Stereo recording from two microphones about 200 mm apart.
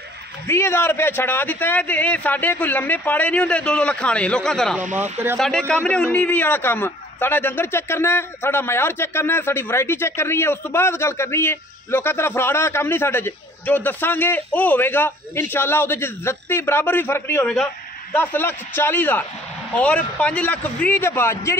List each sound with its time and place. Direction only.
0.5 s a man's voice: 10° left (ahead or behind)